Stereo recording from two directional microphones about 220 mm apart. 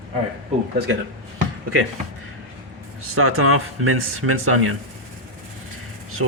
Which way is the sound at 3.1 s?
75° right (ahead or behind).